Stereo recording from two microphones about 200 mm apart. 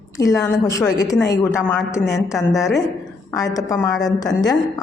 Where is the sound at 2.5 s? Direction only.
Centre (ahead or behind).